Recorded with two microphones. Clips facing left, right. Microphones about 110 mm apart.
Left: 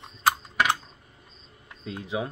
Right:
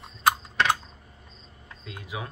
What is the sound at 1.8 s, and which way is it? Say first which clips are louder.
Speech: left 6 dB; 25° left (ahead or behind).